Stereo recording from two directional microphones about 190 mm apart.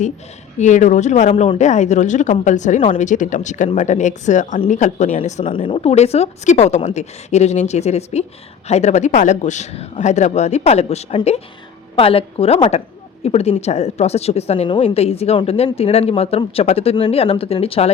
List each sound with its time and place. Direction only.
0.6 s a woman's voice: 40° left (ahead or behind)